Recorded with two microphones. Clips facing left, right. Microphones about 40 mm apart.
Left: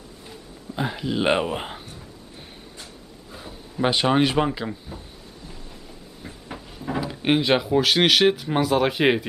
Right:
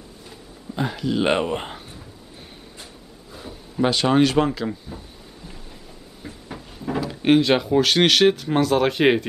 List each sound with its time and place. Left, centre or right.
0.3 s speech: centre
3.3 s a sound: centre
3.9 s speech: centre
4.6 s speech: centre
6.2 s speech: centre